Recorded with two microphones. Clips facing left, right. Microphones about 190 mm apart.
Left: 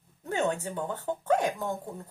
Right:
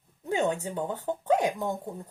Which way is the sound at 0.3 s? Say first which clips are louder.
Right 2 dB; 15° right (ahead or behind).